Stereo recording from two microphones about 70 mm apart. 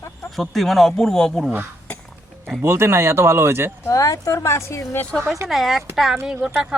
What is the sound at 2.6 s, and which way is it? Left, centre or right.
Speech, right.